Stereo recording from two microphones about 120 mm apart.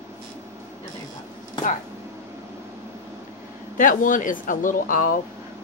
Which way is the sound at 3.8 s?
90° left.